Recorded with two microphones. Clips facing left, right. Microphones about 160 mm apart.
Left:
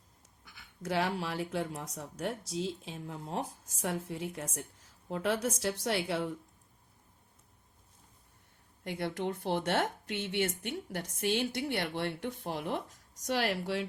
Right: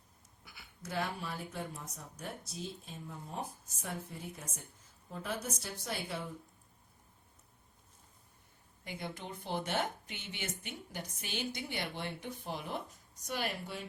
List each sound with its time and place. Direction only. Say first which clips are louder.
0.9 s speech: left 6 dB; 85° left
8.8 s speech: left 9 dB; 70° left (ahead or behind)
13.2 s speech: left 7 dB; 85° left